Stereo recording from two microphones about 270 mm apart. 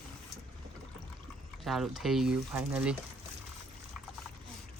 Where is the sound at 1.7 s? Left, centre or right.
Centre.